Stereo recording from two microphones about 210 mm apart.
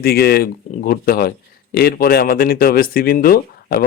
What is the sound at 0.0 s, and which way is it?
Speech, 50° left (ahead or behind).